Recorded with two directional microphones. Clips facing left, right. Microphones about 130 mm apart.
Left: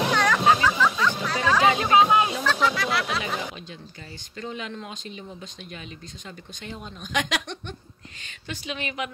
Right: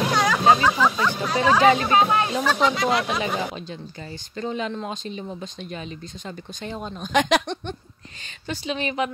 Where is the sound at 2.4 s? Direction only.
20° right (ahead or behind).